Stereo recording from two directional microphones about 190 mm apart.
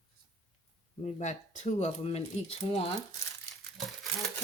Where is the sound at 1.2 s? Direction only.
40° left (ahead or behind).